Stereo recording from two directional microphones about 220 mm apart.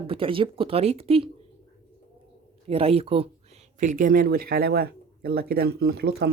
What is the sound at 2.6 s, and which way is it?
Speech, 25° right (ahead or behind).